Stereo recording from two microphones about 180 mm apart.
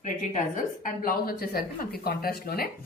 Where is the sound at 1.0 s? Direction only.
55° left (ahead or behind).